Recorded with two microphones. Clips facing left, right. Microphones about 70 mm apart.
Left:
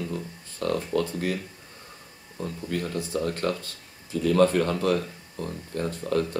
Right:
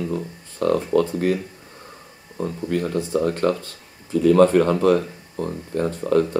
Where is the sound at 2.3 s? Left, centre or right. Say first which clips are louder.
Right 7 dB; right.